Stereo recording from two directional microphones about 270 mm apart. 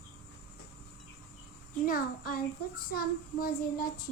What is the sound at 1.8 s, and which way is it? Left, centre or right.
A child's voice, left.